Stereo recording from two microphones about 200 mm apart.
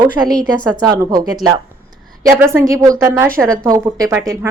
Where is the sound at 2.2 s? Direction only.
10° right (ahead or behind).